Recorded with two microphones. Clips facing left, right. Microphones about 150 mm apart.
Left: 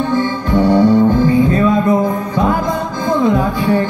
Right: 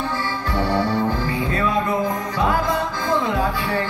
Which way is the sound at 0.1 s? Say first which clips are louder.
Left 10 dB; 20° left (ahead or behind).